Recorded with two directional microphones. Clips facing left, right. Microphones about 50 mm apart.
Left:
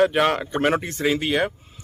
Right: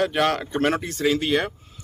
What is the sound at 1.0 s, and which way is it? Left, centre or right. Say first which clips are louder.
Speech: even; centre.